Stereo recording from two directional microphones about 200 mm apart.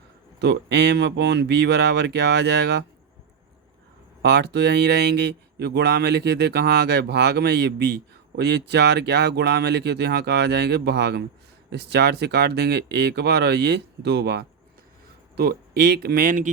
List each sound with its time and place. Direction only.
0.3 s speech: 60° right (ahead or behind)
4.2 s speech: 55° right (ahead or behind)